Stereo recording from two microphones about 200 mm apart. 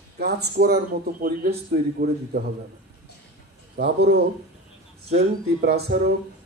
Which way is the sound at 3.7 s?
55° right (ahead or behind).